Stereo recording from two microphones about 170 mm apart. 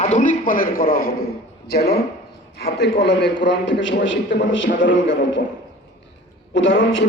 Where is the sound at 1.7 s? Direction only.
70° left (ahead or behind).